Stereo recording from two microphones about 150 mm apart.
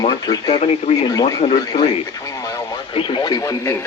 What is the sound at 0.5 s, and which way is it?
Speech, 40° left (ahead or behind).